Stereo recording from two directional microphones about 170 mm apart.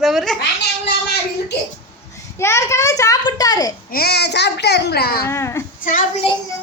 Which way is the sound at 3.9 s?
70° left (ahead or behind).